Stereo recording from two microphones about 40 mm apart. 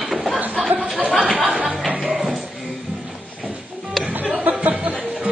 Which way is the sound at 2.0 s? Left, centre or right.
Right.